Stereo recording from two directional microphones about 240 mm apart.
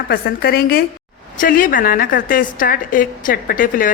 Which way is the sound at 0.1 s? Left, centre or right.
Left.